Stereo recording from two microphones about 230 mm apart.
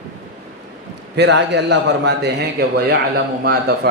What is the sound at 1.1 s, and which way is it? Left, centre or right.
Speech, right.